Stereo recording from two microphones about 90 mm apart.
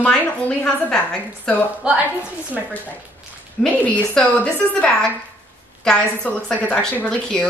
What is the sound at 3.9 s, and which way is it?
A woman's voice, 15° left (ahead or behind).